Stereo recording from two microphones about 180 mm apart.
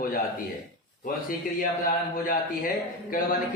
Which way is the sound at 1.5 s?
50° left (ahead or behind).